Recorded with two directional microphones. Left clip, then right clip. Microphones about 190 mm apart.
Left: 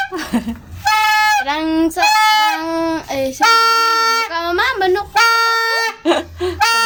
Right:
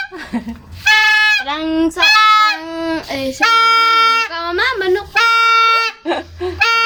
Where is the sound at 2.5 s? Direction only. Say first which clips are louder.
Left 2 dB; 20° left (ahead or behind).